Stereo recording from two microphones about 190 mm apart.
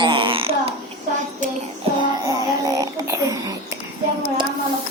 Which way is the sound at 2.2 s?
15° right (ahead or behind).